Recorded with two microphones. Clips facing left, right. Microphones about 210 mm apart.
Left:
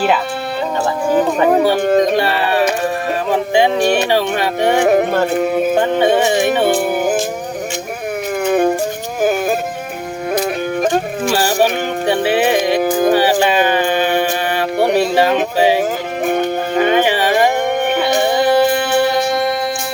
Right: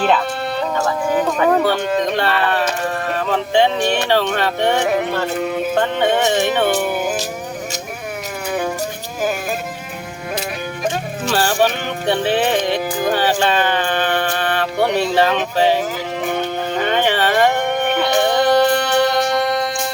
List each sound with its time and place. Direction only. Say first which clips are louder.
1.4 s speech: left 1 dB; 15° left (ahead or behind)
1.8 s music: left 6 dB; 50° left (ahead or behind)
2.0 s a sound: left 3 dB; 10° left (ahead or behind)
3.8 s music: left 4 dB; 40° left (ahead or behind)
4.1 s speech: left 2 dB; 10° left (ahead or behind)
4.8 s music: left 6 dB; 50° left (ahead or behind)
6.0 s speech: left 2 dB; 10° left (ahead or behind)
11.3 s speech: left 1 dB; 10° left (ahead or behind)
12.8 s speech: left 7 dB; 50° left (ahead or behind)
13.1 s music: left 2 dB; 10° left (ahead or behind)
16.8 s music: left 3 dB; 10° left (ahead or behind)